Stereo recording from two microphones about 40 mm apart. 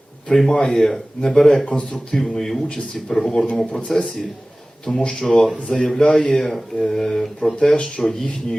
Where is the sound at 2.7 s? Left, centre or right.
Left.